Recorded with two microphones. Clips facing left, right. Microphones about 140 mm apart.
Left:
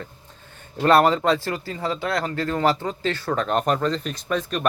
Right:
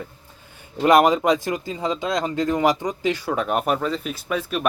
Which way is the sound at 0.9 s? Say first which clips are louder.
Right 1 dB; 15° right (ahead or behind).